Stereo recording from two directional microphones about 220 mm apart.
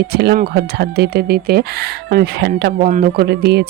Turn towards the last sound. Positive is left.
turn(degrees=-45)  # may be behind; listen again after turning